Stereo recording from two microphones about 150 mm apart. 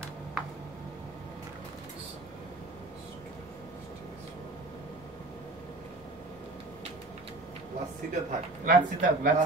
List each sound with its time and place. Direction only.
8.1 s speech: 60° right (ahead or behind)